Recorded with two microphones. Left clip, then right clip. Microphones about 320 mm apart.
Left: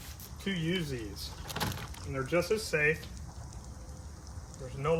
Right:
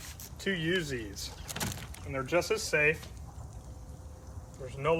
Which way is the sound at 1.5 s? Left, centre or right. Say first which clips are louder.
Left 3 dB; centre.